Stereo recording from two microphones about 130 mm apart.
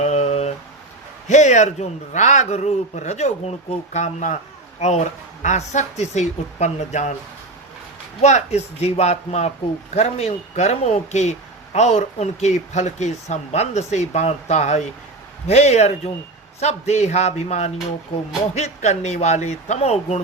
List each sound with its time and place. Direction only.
0.0 s a sound: 55° left (ahead or behind)
1.3 s speech: 65° left (ahead or behind)
8.2 s speech: 60° left (ahead or behind)